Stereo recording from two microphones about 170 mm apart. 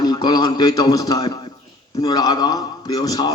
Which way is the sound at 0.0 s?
25° left (ahead or behind).